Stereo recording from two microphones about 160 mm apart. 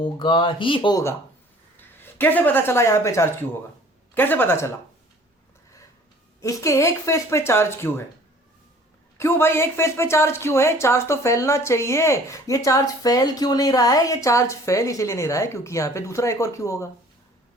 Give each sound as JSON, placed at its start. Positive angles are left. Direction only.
{"t": 0.0, "sound": "speech", "side_deg": 30}
{"t": 1.7, "sound": "a man's voice", "side_deg": 15}
{"t": 6.4, "sound": "speech", "side_deg": 20}
{"t": 9.1, "sound": "speech", "side_deg": 15}